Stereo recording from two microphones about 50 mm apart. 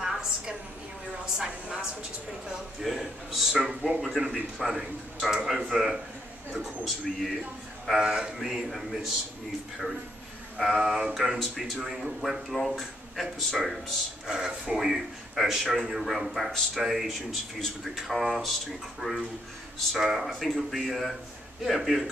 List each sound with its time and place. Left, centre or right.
0.0 s a sound: centre
1.1 s a woman's voice: centre
2.8 s a man's voice: centre
8.0 s a man's voice: centre
10.8 s a man's voice: centre
14.3 s a man's voice: centre